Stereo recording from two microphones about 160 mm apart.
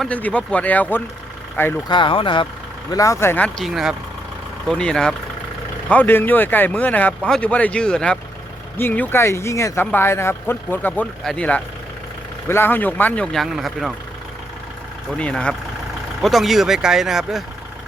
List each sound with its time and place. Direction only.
0.0 s speech: 10° left (ahead or behind)
1.9 s speech: 30° left (ahead or behind)
2.9 s speech: 20° left (ahead or behind); by 13.9 s centre (ahead or behind)
15.2 s speech: 5° left (ahead or behind)